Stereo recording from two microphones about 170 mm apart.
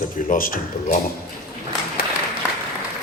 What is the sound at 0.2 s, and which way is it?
Speech, 55° left (ahead or behind).